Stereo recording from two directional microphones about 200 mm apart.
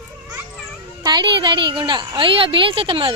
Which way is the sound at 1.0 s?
20° right (ahead or behind).